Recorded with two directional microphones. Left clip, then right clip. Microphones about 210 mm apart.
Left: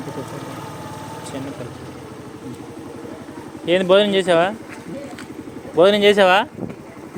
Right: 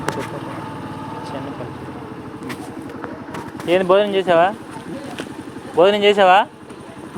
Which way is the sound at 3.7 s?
55° left (ahead or behind).